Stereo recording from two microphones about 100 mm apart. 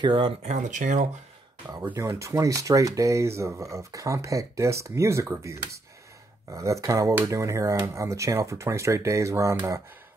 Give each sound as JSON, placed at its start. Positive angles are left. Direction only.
{"t": 0.0, "sound": "speech", "side_deg": -55}
{"t": 1.8, "sound": "speech", "side_deg": -25}